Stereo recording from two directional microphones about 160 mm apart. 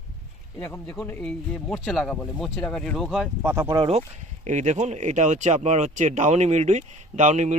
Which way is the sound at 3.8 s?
40° right (ahead or behind).